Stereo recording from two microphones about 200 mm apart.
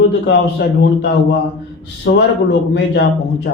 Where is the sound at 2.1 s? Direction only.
50° left (ahead or behind).